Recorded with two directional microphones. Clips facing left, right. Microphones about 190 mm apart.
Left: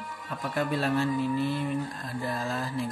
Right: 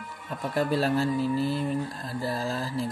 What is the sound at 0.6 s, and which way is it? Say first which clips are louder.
Speech: right 2 dB; 35° right (ahead or behind).